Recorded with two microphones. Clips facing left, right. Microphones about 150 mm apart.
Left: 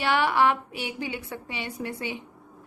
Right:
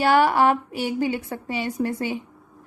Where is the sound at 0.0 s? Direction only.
40° right (ahead or behind).